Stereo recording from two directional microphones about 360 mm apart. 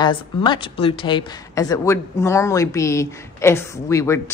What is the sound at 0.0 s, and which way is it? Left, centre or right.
A woman's voice, centre.